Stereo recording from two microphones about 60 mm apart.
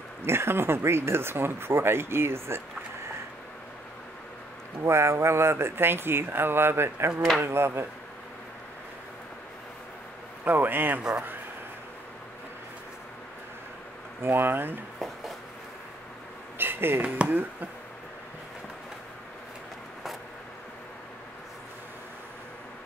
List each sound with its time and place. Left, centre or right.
0.2 s speech: right
4.8 s speech: right
10.4 s a man's voice: right
14.2 s a man's voice: right
16.5 s a sound: right
17.3 s a man's voice: right